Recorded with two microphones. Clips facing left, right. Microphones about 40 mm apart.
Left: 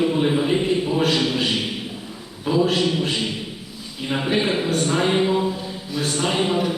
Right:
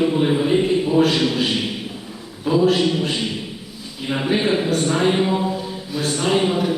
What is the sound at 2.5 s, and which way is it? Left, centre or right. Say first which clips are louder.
Speech: right 3 dB; centre.